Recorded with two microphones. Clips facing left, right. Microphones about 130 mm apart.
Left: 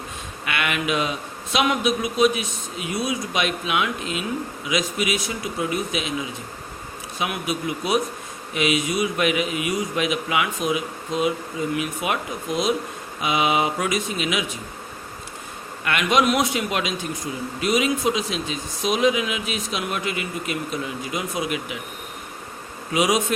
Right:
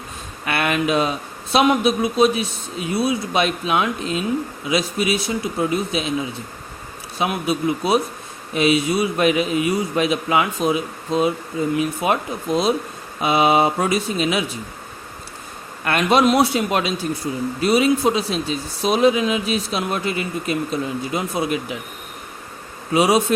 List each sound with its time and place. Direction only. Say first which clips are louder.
0.4 s a sound: right 5 dB; 35° right (ahead or behind)
1.5 s speech: right 5 dB; 30° right (ahead or behind)
7.2 s speech: right 5 dB; 30° right (ahead or behind)
15.8 s speech: right 4 dB; 35° right (ahead or behind)
22.9 s speech: right 4 dB; 30° right (ahead or behind)